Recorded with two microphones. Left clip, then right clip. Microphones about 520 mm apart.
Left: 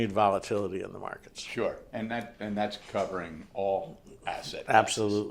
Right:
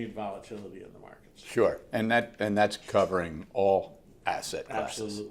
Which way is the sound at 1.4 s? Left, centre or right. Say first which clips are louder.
Right 6 dB; right.